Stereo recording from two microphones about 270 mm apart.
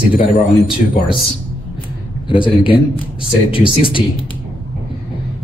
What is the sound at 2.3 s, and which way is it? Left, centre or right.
Speech, centre.